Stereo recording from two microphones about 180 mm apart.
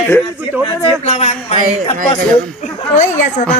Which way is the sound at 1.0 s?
35° left (ahead or behind).